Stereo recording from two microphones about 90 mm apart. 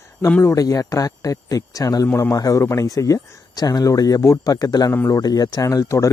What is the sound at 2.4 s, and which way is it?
Speech, 40° left (ahead or behind).